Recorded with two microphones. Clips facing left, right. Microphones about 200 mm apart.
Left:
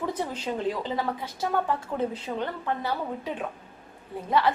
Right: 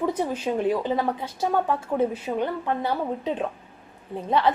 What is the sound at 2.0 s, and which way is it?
A woman's voice, 10° right (ahead or behind).